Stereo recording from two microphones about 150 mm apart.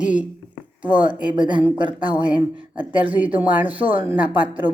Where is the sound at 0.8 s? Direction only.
10° right (ahead or behind).